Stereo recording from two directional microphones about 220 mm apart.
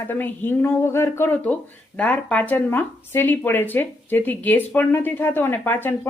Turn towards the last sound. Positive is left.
turn(degrees=10)  # may be behind; listen again after turning